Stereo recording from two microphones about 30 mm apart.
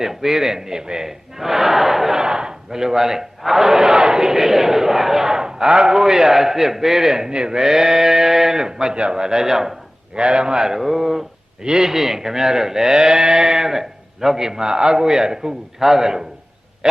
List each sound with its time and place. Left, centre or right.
0.0 s a man's voice: centre
1.4 s speech: centre
2.2 s a man's voice: right
7.3 s speech: right
10.2 s speech: right
10.8 s a man's voice: centre
11.6 s speech: right
11.9 s a man's voice: centre